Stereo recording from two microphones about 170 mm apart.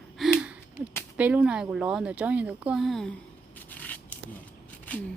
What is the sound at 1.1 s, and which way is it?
Speech, 10° right (ahead or behind).